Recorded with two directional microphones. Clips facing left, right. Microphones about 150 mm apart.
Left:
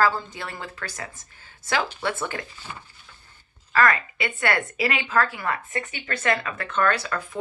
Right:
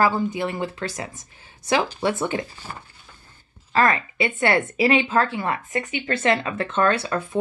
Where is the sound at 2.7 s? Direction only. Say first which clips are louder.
Right 2 dB; 40° right (ahead or behind).